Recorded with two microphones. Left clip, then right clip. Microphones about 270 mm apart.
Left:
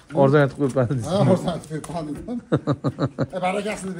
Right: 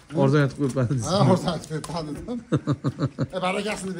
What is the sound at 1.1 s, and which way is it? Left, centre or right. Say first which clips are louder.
Speech: left 1 dB; right.